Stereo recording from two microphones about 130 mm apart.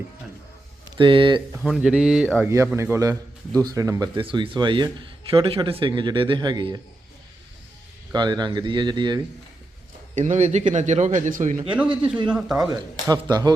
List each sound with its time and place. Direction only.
0.9 s speech: 40° right (ahead or behind)
1.6 s speech: 5° right (ahead or behind)
2.7 s speech: 20° right (ahead or behind)
4.1 s speech: 40° right (ahead or behind)
8.1 s speech: 35° right (ahead or behind)
10.2 s speech: 65° right (ahead or behind); by 11.6 s 85° right
12.3 s speech: 5° right (ahead or behind)
12.7 s speech: 30° right (ahead or behind)